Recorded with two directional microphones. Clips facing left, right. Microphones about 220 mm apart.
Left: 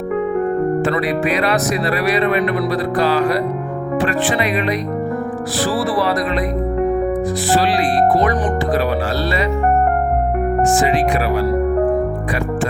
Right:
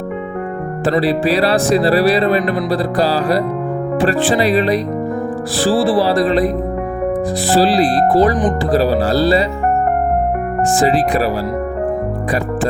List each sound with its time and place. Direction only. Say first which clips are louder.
0.9 s speech: right 3 dB; 30° right (ahead or behind)
7.5 s speech: right 4 dB; 35° right (ahead or behind)
10.8 s speech: right 2 dB; 35° right (ahead or behind)